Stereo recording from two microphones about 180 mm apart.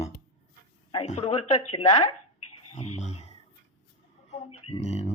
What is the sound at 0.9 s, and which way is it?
Speech, 35° left (ahead or behind).